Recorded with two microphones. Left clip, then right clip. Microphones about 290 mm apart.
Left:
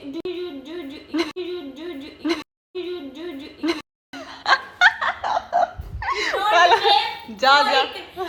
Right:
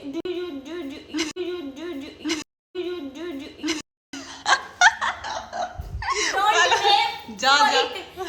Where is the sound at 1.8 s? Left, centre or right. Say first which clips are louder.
Left 1 dB; centre.